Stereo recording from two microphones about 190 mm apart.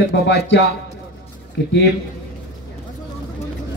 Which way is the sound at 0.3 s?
70° left (ahead or behind).